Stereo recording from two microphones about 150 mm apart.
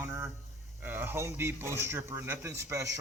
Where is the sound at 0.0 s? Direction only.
15° right (ahead or behind).